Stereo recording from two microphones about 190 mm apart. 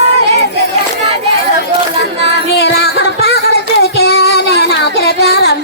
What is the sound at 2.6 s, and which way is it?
Music, 60° left (ahead or behind).